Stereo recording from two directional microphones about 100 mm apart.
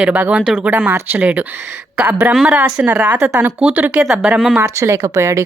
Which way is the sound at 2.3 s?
5° right (ahead or behind).